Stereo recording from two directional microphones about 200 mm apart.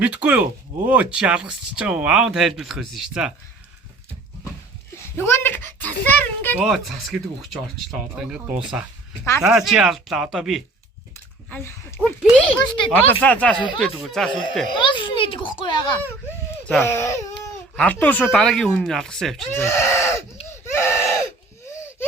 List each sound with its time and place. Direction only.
0.0 s speech: 5° right (ahead or behind)
5.1 s a child's voice: 10° left (ahead or behind)
11.4 s a child's voice: 10° left (ahead or behind)
11.9 s a child's voice: centre (ahead or behind)
14.7 s a child's voice: 25° left (ahead or behind)
16.6 s speech: 10° left (ahead or behind)
19.6 s a child's voice: 15° left (ahead or behind)
20.7 s a sound: 15° left (ahead or behind)